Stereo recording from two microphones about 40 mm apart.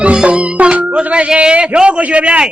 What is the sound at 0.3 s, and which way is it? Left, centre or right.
Music, right.